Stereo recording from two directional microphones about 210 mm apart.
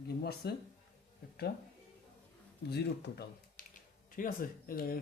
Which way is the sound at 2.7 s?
50° left (ahead or behind).